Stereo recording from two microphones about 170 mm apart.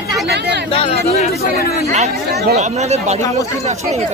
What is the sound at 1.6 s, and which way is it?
Speech, 65° left (ahead or behind).